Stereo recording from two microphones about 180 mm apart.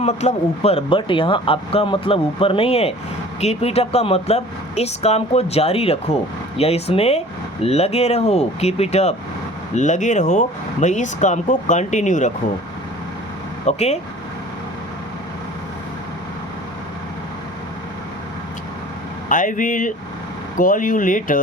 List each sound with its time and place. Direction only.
0.0 s speech: 40° left (ahead or behind)
13.7 s speech: 35° left (ahead or behind)
19.3 s speech: 45° left (ahead or behind)